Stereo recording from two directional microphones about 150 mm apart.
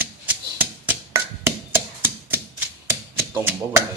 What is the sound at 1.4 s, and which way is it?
Typewriter, 15° right (ahead or behind).